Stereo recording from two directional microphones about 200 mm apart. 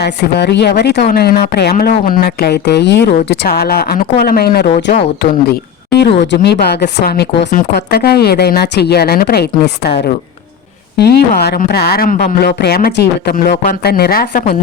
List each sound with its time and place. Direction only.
0.0 s a woman's voice: 55° left (ahead or behind)
4.7 s speech: 35° left (ahead or behind)
5.2 s a woman's voice: 55° left (ahead or behind)
13.5 s speech: 35° left (ahead or behind)
13.8 s a woman's voice: 50° left (ahead or behind)